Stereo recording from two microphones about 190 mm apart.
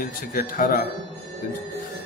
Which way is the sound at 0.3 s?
45° left (ahead or behind).